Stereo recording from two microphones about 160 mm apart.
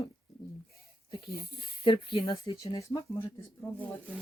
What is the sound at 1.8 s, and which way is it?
Speech, 30° left (ahead or behind).